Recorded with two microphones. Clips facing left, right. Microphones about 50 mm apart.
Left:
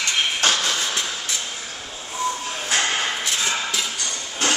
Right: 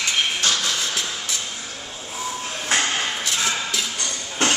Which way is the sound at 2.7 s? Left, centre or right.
Centre.